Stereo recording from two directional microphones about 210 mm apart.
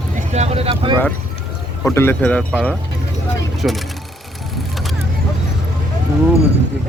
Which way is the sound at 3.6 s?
5° right (ahead or behind).